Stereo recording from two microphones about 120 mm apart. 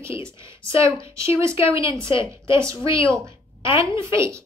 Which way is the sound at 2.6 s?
25° right (ahead or behind).